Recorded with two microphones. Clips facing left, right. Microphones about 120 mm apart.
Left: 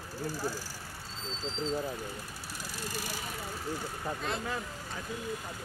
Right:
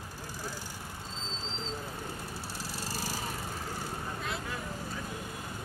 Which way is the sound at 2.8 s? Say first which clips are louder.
Even; 35° right (ahead or behind).